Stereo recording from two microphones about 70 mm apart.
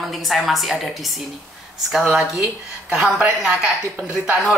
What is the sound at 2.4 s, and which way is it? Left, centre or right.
Speech, centre.